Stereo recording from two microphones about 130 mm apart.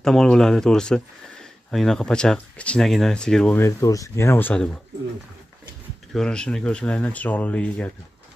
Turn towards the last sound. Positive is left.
turn(degrees=10)  # may be behind; listen again after turning